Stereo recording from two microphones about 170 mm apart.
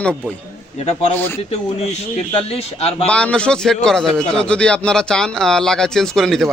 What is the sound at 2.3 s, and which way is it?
Speech, 35° left (ahead or behind).